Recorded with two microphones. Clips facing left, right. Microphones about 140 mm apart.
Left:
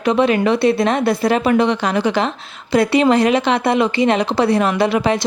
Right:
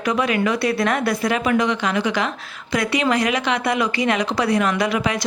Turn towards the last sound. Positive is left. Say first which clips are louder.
# left 5 dB
turn(degrees=30)  # may be behind; listen again after turning